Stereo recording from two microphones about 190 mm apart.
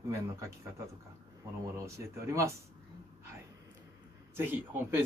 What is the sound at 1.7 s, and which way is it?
Speech, 15° right (ahead or behind).